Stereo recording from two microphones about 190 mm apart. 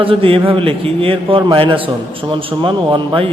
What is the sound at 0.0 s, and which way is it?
A man's voice, 30° right (ahead or behind).